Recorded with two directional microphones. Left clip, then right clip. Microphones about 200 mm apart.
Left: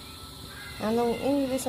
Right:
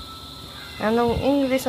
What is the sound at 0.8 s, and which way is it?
Speech, 5° right (ahead or behind).